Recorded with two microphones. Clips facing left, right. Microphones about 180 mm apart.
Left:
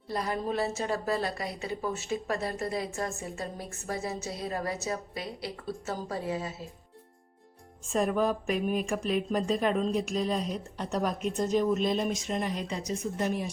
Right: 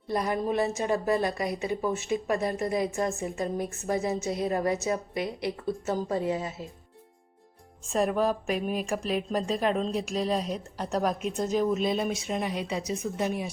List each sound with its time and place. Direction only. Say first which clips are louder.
0.1 s a woman's voice: right 4 dB; 20° right (ahead or behind)
7.9 s a woman's voice: right 1 dB; centre (ahead or behind)